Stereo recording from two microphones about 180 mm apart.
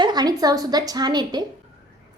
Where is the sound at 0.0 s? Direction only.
25° right (ahead or behind).